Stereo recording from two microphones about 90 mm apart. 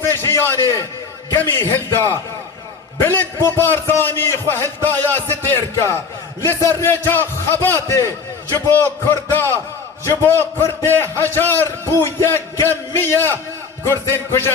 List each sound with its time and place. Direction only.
0.0 s a sound: 30° left (ahead or behind)
1.4 s a man's voice: 25° left (ahead or behind)
10.8 s a man's voice: 25° left (ahead or behind)